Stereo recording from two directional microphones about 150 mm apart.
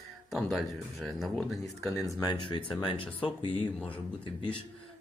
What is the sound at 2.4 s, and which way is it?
Speech, 35° left (ahead or behind).